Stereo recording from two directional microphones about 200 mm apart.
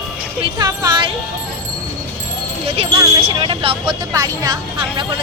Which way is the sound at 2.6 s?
25° right (ahead or behind).